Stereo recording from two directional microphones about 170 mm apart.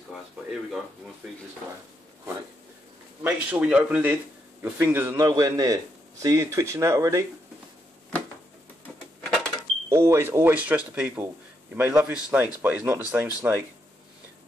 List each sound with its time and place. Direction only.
0.1 s speech: centre (ahead or behind)
3.3 s speech: 10° right (ahead or behind)
5.2 s a man's voice: 20° right (ahead or behind)
9.2 s a sound: 5° left (ahead or behind)
9.8 s speech: 15° right (ahead or behind)